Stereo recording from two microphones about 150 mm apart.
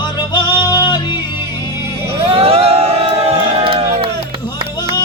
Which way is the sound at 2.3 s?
40° right (ahead or behind).